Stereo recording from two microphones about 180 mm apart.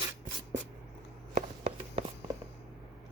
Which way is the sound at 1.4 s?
40° right (ahead or behind).